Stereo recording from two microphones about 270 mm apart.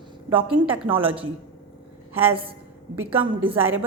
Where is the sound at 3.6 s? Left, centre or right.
Centre.